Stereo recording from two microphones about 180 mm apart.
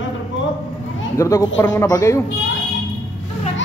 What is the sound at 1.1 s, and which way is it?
A man's voice, 15° left (ahead or behind).